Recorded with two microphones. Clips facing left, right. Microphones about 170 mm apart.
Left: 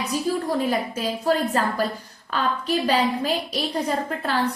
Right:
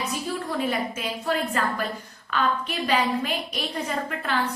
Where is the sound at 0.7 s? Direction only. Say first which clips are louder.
Left 3 dB; 35° left (ahead or behind).